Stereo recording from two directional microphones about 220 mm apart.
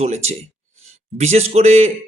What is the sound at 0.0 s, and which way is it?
A man's voice, 30° right (ahead or behind).